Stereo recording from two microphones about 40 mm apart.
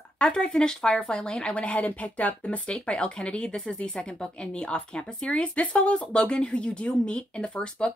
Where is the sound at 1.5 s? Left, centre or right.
Left.